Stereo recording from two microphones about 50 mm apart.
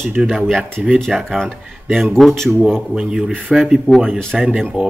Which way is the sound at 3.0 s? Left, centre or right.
Centre.